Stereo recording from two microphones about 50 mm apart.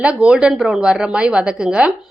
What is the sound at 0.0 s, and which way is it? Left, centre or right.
A woman's voice, right.